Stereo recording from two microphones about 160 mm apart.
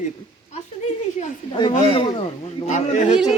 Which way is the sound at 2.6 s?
50° left (ahead or behind).